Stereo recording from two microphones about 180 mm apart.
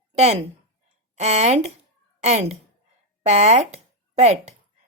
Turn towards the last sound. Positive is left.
turn(degrees=-40)  # may be behind; listen again after turning